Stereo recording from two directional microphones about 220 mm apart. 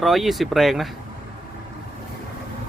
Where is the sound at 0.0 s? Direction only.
Centre (ahead or behind).